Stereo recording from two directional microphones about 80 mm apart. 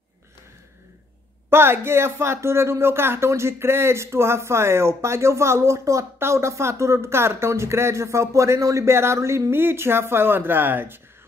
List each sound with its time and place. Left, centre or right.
1.5 s a woman's voice: right